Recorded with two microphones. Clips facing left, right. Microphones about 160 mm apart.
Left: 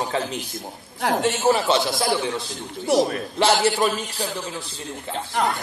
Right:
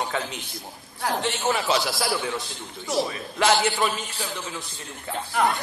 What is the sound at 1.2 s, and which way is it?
Speech, 40° left (ahead or behind).